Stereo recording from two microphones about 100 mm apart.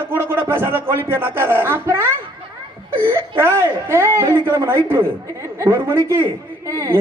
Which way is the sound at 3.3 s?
25° right (ahead or behind).